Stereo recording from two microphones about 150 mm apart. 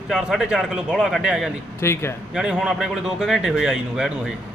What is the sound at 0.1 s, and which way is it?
Speech, 5° right (ahead or behind).